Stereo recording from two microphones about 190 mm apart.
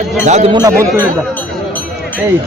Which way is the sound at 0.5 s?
20° right (ahead or behind).